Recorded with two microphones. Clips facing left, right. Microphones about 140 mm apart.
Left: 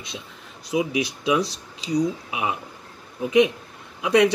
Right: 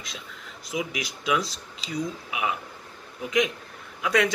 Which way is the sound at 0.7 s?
25° left (ahead or behind).